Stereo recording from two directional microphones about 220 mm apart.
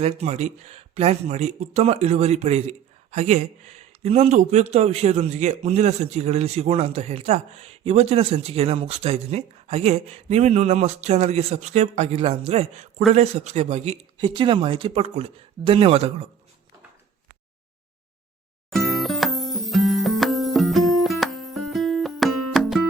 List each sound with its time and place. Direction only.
0.0 s speech: 30° right (ahead or behind)
18.7 s music: centre (ahead or behind)